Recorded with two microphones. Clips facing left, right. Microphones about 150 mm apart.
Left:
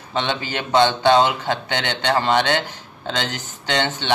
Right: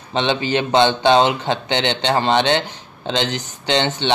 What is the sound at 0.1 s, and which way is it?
Speech, 20° right (ahead or behind).